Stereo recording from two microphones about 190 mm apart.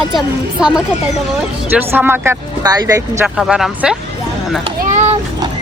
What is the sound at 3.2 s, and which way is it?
Speech, 5° right (ahead or behind).